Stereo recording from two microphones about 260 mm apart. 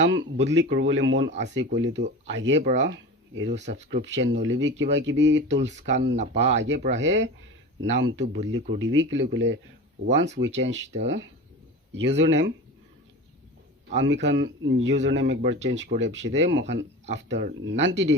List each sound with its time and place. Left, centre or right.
0.1 s speech: right
13.9 s speech: right